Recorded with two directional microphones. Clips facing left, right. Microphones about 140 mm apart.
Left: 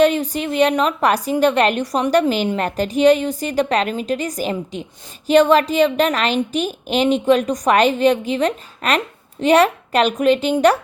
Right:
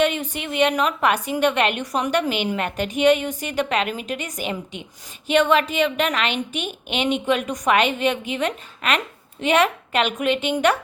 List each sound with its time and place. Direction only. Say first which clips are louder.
0.0 s a woman's voice: left 6 dB; 35° left (ahead or behind)